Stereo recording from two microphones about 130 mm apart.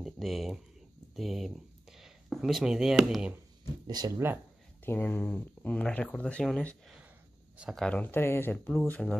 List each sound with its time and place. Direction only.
0.0 s speech: centre (ahead or behind)
3.8 s speech: 30° right (ahead or behind)
4.8 s speech: 15° left (ahead or behind)